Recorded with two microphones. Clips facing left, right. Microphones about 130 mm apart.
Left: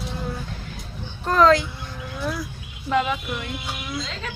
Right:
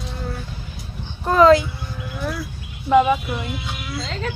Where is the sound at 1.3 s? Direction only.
5° right (ahead or behind).